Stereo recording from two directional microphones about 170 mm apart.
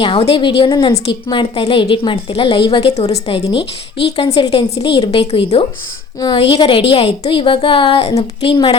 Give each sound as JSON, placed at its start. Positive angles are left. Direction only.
{"t": 0.0, "sound": "a woman's voice", "side_deg": 30}